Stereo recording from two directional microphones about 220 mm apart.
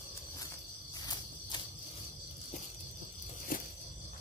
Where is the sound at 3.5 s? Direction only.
40° left (ahead or behind).